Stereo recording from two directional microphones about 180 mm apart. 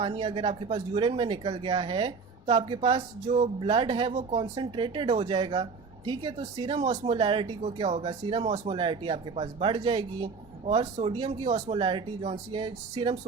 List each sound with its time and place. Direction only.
0.0 s speech: 30° right (ahead or behind)